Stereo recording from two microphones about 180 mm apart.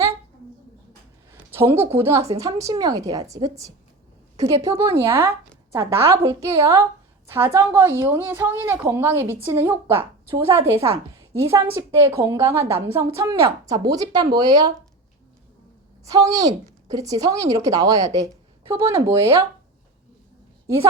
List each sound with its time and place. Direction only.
1.5 s a sound: 10° right (ahead or behind)
1.9 s a woman's voice: 15° right (ahead or behind)
16.0 s a woman's voice: 20° right (ahead or behind)